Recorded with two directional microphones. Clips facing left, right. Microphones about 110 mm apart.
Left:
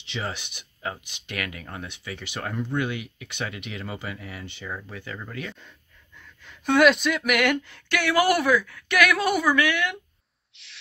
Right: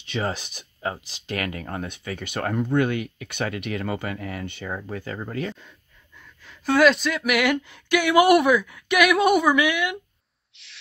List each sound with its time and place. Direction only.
0.0 s speech: 45° right (ahead or behind)
5.6 s speech: 5° right (ahead or behind)
10.5 s owl: centre (ahead or behind)